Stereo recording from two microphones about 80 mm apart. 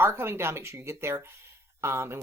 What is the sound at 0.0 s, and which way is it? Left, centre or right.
Speech, right.